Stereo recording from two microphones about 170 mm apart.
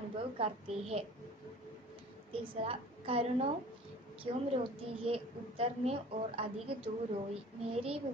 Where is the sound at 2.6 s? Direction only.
35° right (ahead or behind).